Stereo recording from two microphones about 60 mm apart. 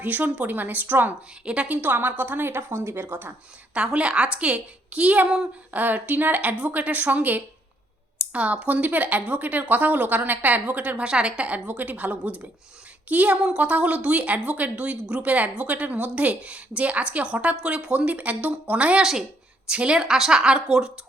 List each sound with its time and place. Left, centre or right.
0.0 s a woman's voice: right
3.8 s a woman's voice: centre